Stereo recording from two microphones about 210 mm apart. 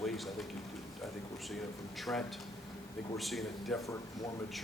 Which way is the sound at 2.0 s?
Centre (ahead or behind).